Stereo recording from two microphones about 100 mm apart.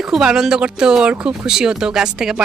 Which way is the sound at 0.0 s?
5° right (ahead or behind).